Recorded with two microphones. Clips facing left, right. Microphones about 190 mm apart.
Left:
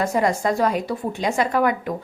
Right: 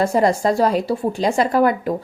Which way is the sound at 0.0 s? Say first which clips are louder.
Right 4 dB; 35° right (ahead or behind).